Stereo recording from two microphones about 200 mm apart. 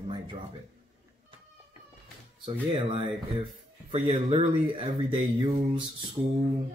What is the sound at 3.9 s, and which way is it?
Speech, 30° right (ahead or behind).